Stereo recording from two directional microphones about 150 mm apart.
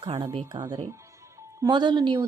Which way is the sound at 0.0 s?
30° right (ahead or behind).